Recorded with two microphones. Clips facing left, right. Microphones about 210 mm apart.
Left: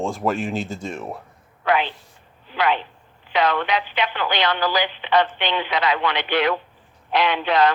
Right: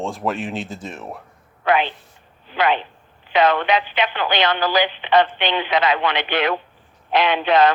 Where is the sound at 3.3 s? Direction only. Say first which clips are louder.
Right 4 dB; 25° right (ahead or behind).